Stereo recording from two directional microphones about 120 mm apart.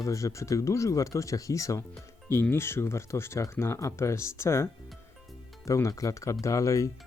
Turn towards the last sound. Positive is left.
turn(degrees=25)  # may be behind; listen again after turning